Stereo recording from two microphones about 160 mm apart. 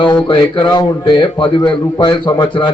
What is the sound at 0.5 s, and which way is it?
A man's voice, 30° left (ahead or behind).